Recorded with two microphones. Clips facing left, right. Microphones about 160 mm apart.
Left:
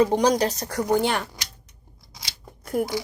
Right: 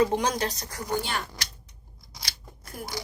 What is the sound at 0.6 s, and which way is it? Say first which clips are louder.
Speech: left 9 dB; 65° left (ahead or behind).